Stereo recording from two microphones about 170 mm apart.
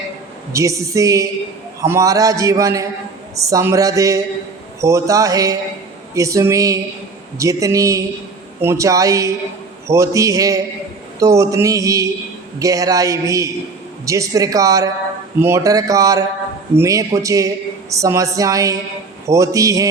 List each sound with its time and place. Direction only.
0.5 s a man's voice: 20° right (ahead or behind)